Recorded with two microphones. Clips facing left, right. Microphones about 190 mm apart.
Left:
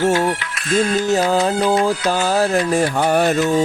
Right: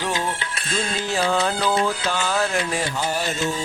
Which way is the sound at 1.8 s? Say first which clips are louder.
Left 6 dB; 40° left (ahead or behind).